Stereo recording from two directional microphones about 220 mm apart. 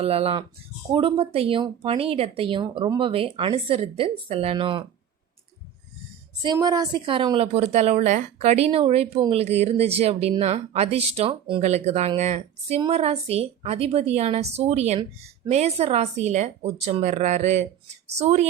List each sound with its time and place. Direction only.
0.0 s a woman's voice: 25° right (ahead or behind)
6.4 s a woman's voice: 20° right (ahead or behind)